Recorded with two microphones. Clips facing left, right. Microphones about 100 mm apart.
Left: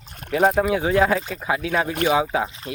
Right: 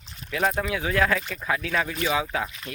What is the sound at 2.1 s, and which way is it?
Speech, 25° left (ahead or behind).